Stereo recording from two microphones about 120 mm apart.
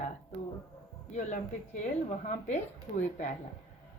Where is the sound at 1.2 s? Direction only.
90° left.